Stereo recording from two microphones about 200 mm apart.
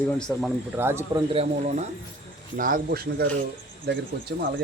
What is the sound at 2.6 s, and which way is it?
Speech, 45° right (ahead or behind).